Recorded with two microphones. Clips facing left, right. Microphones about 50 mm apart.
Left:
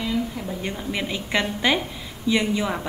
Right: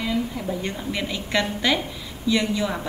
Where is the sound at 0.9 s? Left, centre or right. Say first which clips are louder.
Left 1 dB; centre.